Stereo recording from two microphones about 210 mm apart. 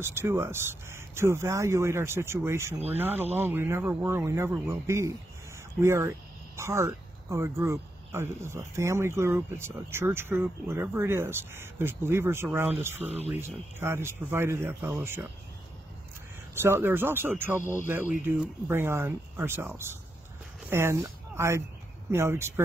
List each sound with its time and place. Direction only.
0.0 s speech: 10° right (ahead or behind)
13.0 s speech: 30° right (ahead or behind)
13.3 s speech: 10° right (ahead or behind)
16.6 s speech: 10° right (ahead or behind)